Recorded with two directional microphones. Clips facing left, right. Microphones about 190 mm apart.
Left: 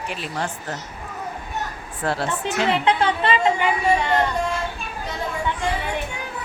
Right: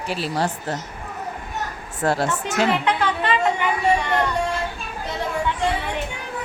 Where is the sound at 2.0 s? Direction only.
45° right (ahead or behind).